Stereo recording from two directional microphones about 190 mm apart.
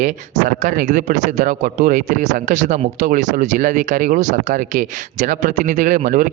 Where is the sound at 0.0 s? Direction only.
40° right (ahead or behind).